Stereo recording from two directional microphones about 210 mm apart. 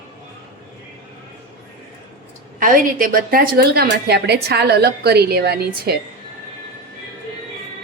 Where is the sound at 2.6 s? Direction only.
40° right (ahead or behind).